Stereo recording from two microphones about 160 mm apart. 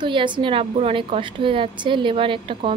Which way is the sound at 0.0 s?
30° right (ahead or behind).